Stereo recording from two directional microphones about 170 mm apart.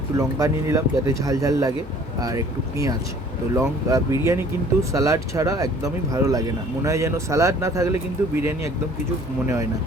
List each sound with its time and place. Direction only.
0.2 s speech: 20° right (ahead or behind)